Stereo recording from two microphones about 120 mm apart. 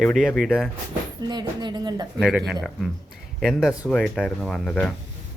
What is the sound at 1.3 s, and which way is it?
Speech, 35° right (ahead or behind).